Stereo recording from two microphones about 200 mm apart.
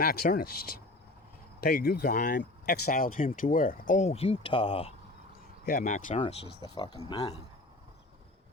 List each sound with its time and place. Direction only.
0.0 s speech: 45° left (ahead or behind); by 4.9 s 30° left (ahead or behind)
5.6 s speech: 40° left (ahead or behind)
6.1 s speech: 25° left (ahead or behind)